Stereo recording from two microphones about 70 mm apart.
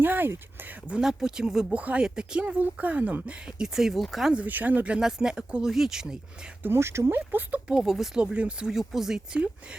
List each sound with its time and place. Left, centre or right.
0.0 s a sound: right
0.9 s speech: centre
1.7 s speech: centre
4.4 s speech: right
4.9 s speech: centre
6.6 s speech: right
7.3 s speech: right
7.7 s speech: centre
8.2 s speech: centre